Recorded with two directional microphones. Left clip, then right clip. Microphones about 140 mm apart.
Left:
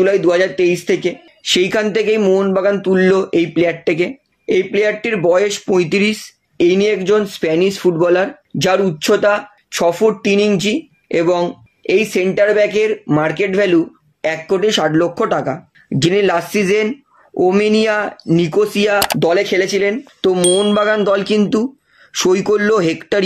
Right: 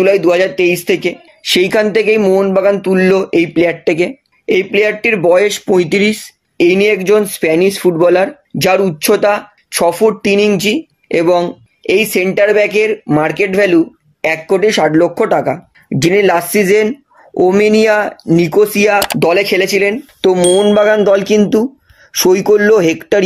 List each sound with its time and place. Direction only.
0.0 s speech: 40° right (ahead or behind); by 4.1 s 25° right (ahead or behind)
4.5 s speech: 40° right (ahead or behind)
19.2 s speech: 45° right (ahead or behind)
19.8 s speech: 35° right (ahead or behind)
20.5 s speech: 20° right (ahead or behind)